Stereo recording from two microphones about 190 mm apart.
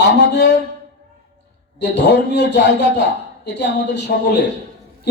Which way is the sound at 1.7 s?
65° left (ahead or behind).